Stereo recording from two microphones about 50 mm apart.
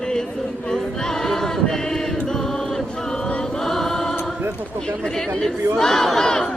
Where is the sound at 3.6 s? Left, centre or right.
Centre.